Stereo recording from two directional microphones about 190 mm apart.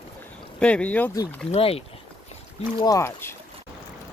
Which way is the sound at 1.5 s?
30° left (ahead or behind).